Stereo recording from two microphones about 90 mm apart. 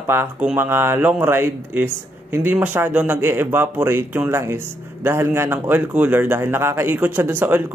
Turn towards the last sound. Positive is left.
turn(degrees=-25)  # may be behind; listen again after turning